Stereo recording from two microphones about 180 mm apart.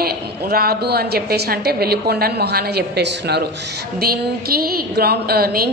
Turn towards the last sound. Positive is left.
turn(degrees=-60)  # may be behind; listen again after turning